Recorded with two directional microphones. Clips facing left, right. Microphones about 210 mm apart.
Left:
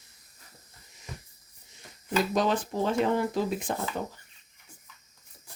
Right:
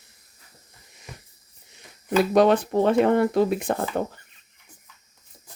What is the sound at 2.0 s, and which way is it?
Speech, 65° right (ahead or behind).